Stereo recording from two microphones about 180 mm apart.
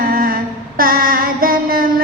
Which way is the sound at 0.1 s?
55° right (ahead or behind).